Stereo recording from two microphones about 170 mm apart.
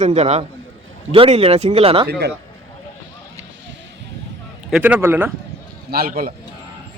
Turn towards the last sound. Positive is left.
turn(degrees=-60)  # may be behind; listen again after turning